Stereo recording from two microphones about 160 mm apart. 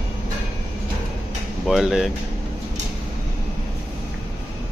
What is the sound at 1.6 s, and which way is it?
Speech, centre (ahead or behind).